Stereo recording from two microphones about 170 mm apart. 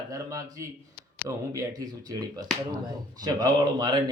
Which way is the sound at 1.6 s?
25° right (ahead or behind).